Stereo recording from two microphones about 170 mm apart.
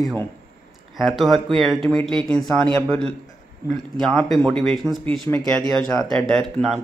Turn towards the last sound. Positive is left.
turn(degrees=0)  # may be behind; listen again after turning